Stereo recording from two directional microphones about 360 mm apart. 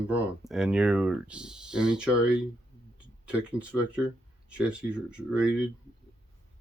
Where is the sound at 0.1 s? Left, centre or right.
Centre.